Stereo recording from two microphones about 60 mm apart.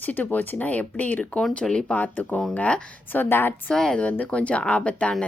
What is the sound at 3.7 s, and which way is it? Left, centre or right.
Speech, centre.